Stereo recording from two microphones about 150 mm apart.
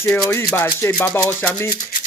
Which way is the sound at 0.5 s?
15° left (ahead or behind).